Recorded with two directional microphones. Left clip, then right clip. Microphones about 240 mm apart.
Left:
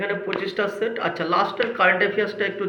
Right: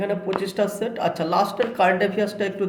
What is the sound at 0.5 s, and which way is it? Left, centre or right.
A man's voice, right.